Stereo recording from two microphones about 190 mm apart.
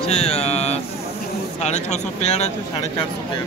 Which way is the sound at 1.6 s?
35° left (ahead or behind).